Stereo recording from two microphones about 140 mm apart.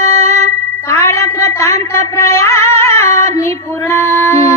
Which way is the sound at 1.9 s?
20° left (ahead or behind).